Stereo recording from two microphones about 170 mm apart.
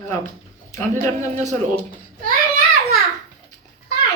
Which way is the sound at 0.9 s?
45° right (ahead or behind).